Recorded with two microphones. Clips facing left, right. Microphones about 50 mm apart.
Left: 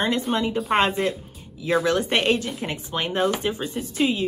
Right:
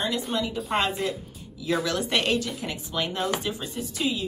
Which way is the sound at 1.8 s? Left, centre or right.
Left.